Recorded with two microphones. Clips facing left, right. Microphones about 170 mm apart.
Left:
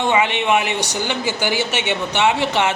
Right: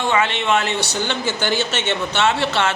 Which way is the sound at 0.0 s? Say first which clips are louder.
Left 2 dB; 15° left (ahead or behind).